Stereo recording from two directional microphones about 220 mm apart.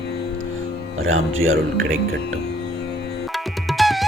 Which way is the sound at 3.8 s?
Centre (ahead or behind).